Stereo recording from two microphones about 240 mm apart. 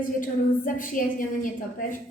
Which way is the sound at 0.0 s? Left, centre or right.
Left.